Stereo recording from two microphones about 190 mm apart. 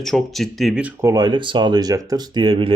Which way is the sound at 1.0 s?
20° right (ahead or behind).